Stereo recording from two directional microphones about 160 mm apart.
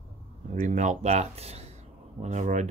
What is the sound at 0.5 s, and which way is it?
Speech, 50° right (ahead or behind).